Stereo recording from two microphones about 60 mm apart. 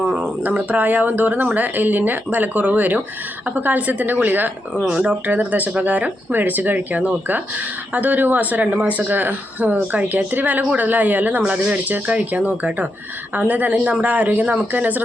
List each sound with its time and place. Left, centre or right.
0.0 s a woman's voice: right
4.7 s speech: centre